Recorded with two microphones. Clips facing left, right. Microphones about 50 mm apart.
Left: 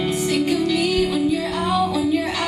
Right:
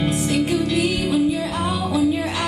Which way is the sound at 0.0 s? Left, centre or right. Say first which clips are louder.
Even; centre.